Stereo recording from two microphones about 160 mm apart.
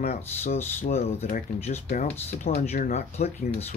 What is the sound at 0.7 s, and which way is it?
Speech, 45° left (ahead or behind).